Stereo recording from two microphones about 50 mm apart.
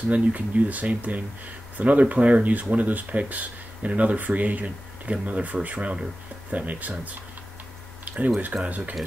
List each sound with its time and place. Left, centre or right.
0.1 s speech: right
8.6 s speech: right